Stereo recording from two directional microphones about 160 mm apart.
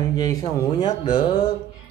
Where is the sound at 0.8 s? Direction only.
35° left (ahead or behind).